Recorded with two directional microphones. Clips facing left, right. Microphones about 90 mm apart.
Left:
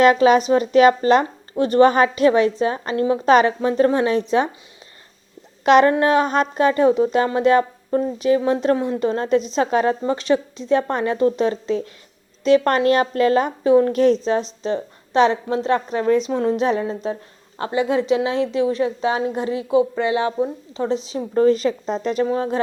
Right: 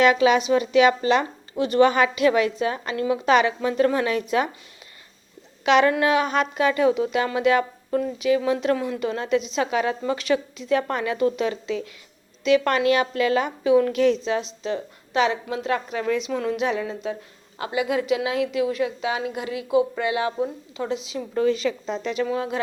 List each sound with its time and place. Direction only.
0.0 s a woman's voice: 40° left (ahead or behind)
5.6 s a woman's voice: 40° left (ahead or behind)